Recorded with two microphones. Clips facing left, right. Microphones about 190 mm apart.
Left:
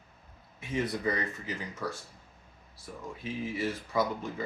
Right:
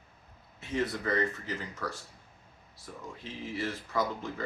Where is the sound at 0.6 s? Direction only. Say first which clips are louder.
Left 1 dB; 15° left (ahead or behind).